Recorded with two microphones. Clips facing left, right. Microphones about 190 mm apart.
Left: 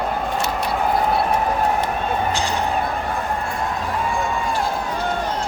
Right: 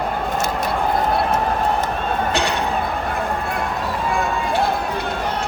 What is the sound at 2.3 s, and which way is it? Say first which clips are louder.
Music: right 2 dB; 65° right (ahead or behind).